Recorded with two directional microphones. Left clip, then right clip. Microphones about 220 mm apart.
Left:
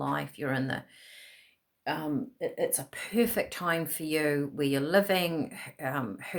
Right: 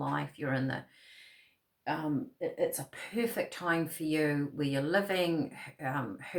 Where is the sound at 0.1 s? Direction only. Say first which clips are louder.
Left 2 dB; 50° left (ahead or behind).